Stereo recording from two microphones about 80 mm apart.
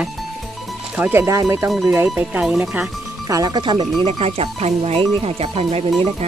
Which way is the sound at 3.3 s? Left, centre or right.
Right.